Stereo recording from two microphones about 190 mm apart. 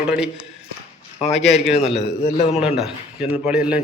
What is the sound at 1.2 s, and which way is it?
Speech, 35° left (ahead or behind).